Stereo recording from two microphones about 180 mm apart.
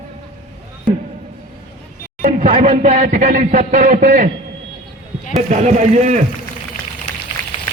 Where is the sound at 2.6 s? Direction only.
40° right (ahead or behind).